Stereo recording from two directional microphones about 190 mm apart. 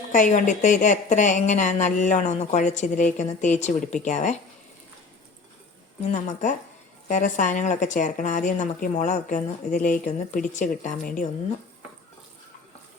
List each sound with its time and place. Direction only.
0.1 s a woman's voice: 40° left (ahead or behind)
6.0 s a woman's voice: 40° left (ahead or behind)